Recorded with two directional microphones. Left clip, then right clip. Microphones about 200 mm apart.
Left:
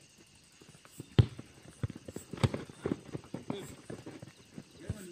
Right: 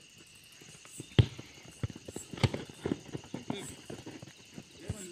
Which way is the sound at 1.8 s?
10° left (ahead or behind).